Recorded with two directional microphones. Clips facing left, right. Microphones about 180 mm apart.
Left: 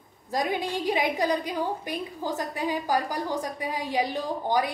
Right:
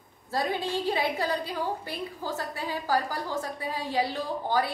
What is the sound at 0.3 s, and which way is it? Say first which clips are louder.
A woman's voice: left 1 dB; 15° left (ahead or behind).